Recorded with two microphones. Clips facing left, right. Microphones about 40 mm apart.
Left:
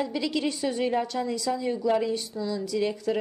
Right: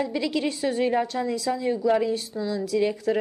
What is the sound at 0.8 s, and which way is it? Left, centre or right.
Speech, centre.